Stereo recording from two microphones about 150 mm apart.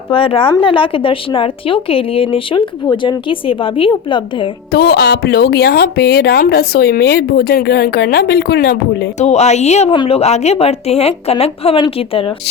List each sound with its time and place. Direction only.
0.1 s a woman's voice: 35° left (ahead or behind)
4.7 s speech: 90° left
9.1 s a woman's voice: 50° left (ahead or behind)
9.9 s a woman's voice: 30° left (ahead or behind)
10.2 s a woman's voice: 45° left (ahead or behind)